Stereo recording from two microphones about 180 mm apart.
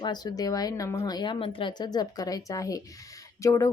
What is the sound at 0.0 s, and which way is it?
Speech, 20° left (ahead or behind).